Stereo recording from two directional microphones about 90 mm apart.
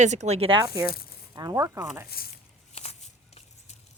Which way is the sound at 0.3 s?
90° right.